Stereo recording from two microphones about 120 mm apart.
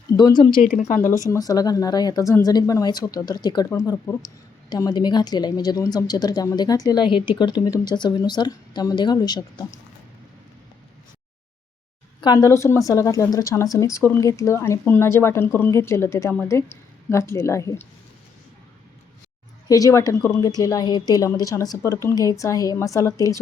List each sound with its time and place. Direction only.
0.2 s speech: 35° left (ahead or behind)
12.2 s speech: 30° left (ahead or behind)
19.6 s speech: 30° left (ahead or behind)